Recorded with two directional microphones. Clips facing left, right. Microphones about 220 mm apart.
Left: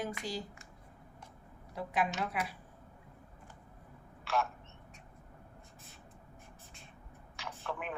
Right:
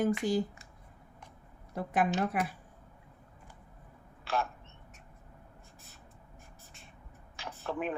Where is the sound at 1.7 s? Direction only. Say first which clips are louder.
Right 4 dB; 50° right (ahead or behind).